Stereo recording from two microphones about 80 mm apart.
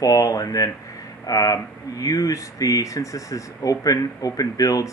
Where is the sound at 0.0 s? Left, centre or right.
Left.